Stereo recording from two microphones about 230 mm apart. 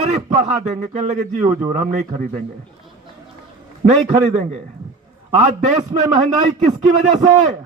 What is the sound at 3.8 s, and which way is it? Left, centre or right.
A man's voice, right.